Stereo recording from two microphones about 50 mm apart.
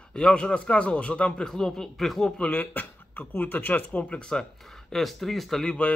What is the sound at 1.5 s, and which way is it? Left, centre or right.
Speech, centre.